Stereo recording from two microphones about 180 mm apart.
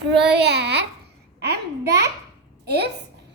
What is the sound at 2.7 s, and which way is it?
Speech, 65° right (ahead or behind).